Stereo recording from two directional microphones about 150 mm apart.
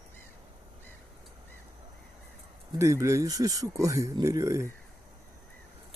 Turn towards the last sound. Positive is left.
turn(degrees=-20)  # may be behind; listen again after turning